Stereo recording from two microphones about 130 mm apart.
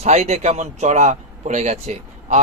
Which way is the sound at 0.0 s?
60° right (ahead or behind).